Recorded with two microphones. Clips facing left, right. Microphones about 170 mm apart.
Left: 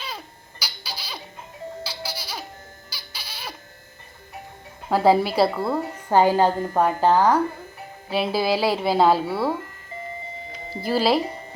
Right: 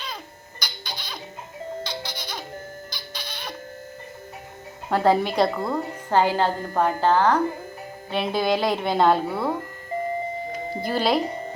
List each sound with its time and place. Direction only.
0.6 s baby laughter: 10° left (ahead or behind)
1.8 s music: 5° left (ahead or behind)
4.9 s a woman's voice: 5° left (ahead or behind)
9.9 s a sound: 45° right (ahead or behind)
10.8 s speech: 5° left (ahead or behind)